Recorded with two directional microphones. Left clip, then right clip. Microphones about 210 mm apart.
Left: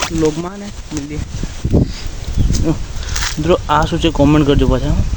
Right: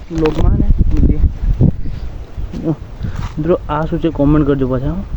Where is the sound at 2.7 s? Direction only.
5° left (ahead or behind).